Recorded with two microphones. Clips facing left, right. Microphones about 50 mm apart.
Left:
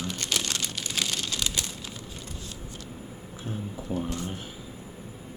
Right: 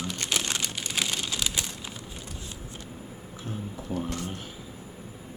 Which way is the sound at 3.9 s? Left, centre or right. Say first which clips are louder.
Left 1 dB; centre.